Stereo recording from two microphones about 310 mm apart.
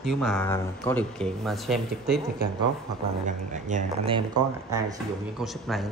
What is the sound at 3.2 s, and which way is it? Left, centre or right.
Speech, right.